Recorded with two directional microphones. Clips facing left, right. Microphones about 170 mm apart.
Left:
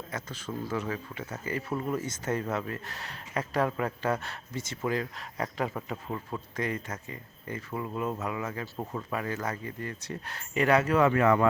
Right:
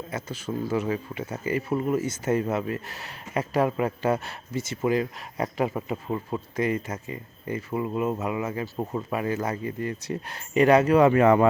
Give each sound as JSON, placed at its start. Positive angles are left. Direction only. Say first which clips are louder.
{"t": 0.1, "sound": "speech", "louder": "right 6 dB", "side_deg": -10}
{"t": 8.7, "sound": "speech", "louder": "right 5 dB", "side_deg": -20}